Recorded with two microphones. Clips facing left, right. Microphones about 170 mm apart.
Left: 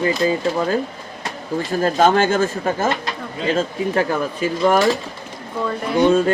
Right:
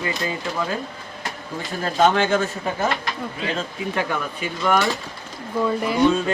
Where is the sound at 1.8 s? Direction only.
40° left (ahead or behind).